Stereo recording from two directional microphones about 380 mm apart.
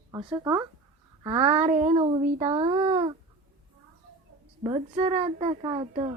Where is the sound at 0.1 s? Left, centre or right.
Centre.